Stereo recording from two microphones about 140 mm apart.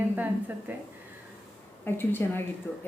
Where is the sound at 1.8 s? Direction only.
15° left (ahead or behind).